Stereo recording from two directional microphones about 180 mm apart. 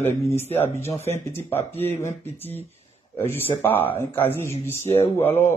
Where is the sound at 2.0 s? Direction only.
15° left (ahead or behind).